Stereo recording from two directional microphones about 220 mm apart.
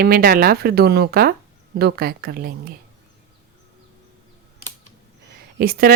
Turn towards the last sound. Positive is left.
turn(degrees=-40)  # may be behind; listen again after turning